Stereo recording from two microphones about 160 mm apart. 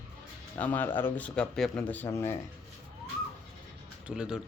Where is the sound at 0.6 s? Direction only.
10° left (ahead or behind).